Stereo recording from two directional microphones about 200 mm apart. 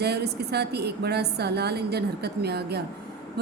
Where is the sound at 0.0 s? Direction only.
55° right (ahead or behind).